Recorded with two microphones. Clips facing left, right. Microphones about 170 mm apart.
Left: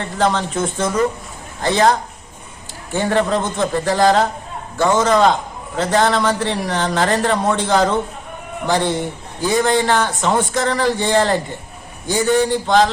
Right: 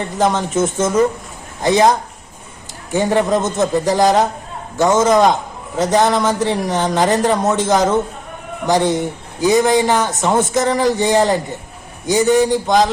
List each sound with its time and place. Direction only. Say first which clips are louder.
0.0 s a man's voice: right 1 dB; 15° right (ahead or behind)
9.5 s a man's voice: right 3 dB; 15° right (ahead or behind)